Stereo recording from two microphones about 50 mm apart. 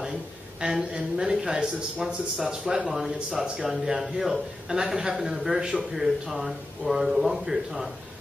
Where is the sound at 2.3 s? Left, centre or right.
Centre.